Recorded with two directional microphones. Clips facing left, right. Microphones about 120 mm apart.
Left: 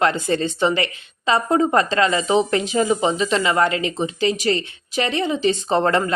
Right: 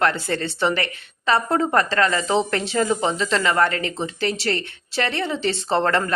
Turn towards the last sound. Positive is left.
turn(degrees=15)  # may be behind; listen again after turning